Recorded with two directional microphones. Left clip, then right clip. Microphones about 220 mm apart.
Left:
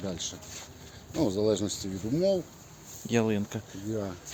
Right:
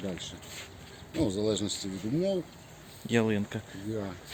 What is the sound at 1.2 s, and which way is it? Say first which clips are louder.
Speech: left 3 dB; 35° left (ahead or behind).